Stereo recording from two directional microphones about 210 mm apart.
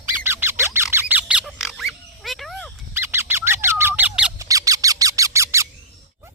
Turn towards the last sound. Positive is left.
turn(degrees=-15)  # may be behind; listen again after turning